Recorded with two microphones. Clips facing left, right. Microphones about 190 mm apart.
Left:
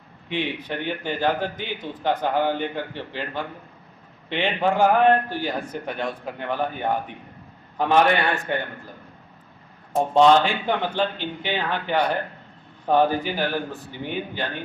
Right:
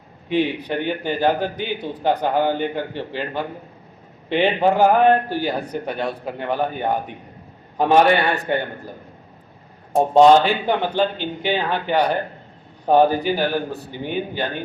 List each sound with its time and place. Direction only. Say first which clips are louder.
0.3 s a man's voice: right 7 dB; 40° right (ahead or behind)
9.9 s a man's voice: right 4 dB; 40° right (ahead or behind)